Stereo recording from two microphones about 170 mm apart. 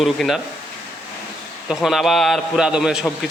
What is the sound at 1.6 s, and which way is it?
Speech, centre (ahead or behind).